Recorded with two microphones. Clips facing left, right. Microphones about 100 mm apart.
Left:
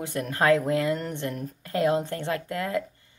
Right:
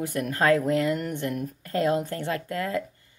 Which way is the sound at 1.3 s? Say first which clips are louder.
Right 3 dB; 35° left (ahead or behind).